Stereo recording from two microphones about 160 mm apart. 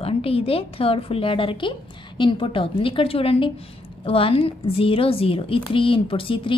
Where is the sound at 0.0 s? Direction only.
35° left (ahead or behind).